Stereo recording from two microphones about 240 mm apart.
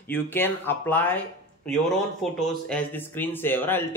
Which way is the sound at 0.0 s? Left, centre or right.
Centre.